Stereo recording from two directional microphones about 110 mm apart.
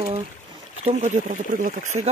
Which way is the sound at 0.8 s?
90° right.